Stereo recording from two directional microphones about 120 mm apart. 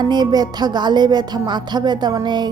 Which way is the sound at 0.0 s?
35° right (ahead or behind).